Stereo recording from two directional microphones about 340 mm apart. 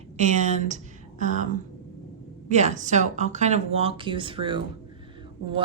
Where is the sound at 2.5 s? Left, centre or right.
Centre.